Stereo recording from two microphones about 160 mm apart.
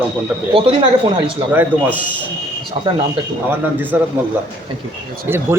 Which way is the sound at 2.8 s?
35° right (ahead or behind).